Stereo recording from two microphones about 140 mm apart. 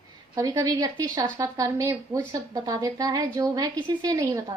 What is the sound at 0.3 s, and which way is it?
Speech, 25° right (ahead or behind).